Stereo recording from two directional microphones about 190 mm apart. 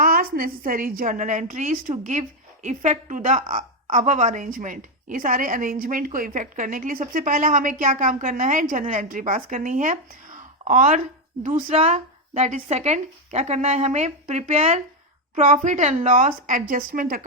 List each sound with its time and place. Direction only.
0.0 s a woman's voice: 50° right (ahead or behind)